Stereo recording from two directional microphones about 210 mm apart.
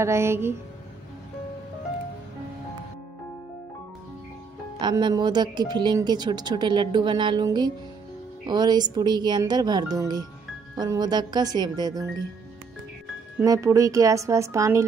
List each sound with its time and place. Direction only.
0.0 s speech: 10° right (ahead or behind)
4.7 s speech: 20° right (ahead or behind)
13.4 s speech: 15° right (ahead or behind)